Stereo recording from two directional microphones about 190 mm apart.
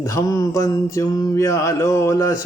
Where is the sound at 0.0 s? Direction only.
15° left (ahead or behind).